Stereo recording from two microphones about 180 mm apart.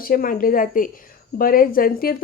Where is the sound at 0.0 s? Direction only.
50° left (ahead or behind).